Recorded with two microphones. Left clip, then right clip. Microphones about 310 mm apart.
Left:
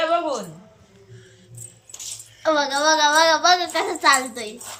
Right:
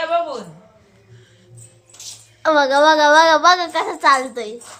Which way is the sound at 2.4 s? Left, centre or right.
Centre.